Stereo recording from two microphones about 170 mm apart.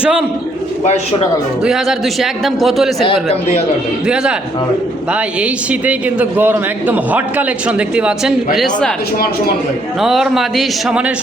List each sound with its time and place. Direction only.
0.0 s a man's voice: 5° right (ahead or behind)
1.6 s a man's voice: centre (ahead or behind)
3.0 s speech: 35° left (ahead or behind)
4.0 s a man's voice: 5° right (ahead or behind)
8.5 s a man's voice: 5° left (ahead or behind)
10.0 s a man's voice: centre (ahead or behind)